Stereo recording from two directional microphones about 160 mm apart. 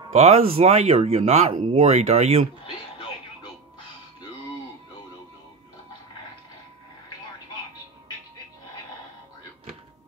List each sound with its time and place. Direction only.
0.1 s speech: 40° right (ahead or behind)